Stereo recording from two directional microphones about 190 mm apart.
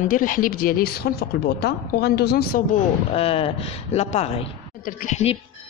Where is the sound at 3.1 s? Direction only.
30° left (ahead or behind).